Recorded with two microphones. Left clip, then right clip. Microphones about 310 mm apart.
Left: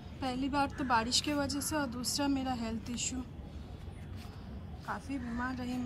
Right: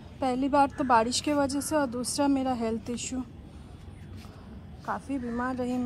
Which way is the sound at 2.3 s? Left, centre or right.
Centre.